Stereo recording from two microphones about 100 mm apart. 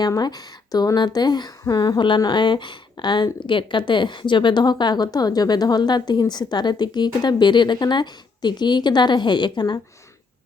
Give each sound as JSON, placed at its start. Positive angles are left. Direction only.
{"t": 0.0, "sound": "speech", "side_deg": 45}